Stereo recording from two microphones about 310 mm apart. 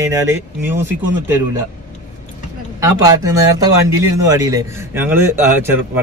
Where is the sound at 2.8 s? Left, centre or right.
Centre.